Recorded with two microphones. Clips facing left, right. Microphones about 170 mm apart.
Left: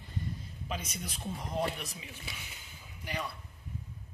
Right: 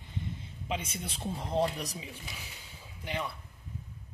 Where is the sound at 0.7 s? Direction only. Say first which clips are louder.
Right 3 dB; 30° right (ahead or behind).